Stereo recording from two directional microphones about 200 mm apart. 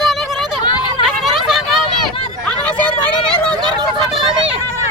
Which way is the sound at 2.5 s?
5° left (ahead or behind).